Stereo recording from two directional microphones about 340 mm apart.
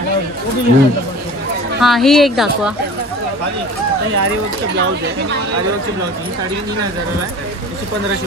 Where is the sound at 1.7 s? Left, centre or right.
Centre.